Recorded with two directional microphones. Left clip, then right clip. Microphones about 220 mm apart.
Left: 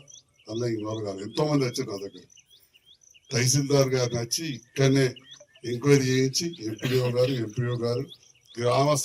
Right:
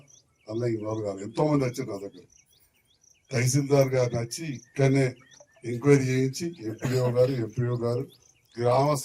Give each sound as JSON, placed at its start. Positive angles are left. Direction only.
{"t": 0.6, "sound": "speech", "side_deg": -40}
{"t": 3.2, "sound": "speech", "side_deg": -40}